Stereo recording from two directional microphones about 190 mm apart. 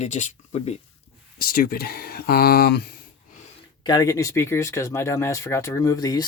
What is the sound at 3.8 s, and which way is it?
Speech, 20° left (ahead or behind).